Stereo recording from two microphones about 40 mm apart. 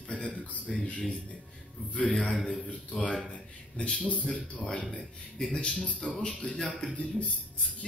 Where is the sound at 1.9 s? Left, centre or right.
Left.